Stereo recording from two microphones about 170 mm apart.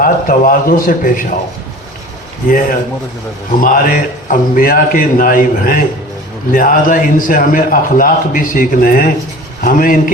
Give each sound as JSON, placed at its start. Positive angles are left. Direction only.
{"t": 0.0, "sound": "a man's voice", "side_deg": 55}
{"t": 2.5, "sound": "a man's voice", "side_deg": 55}